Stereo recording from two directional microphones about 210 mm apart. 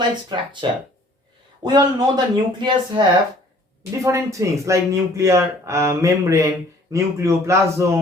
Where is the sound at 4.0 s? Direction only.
15° right (ahead or behind).